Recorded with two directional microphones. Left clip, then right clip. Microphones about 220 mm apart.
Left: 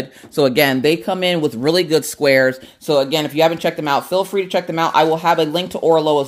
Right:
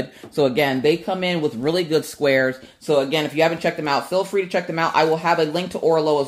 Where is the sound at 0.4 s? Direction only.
40° left (ahead or behind).